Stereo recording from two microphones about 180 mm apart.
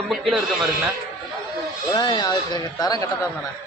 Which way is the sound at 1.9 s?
25° left (ahead or behind).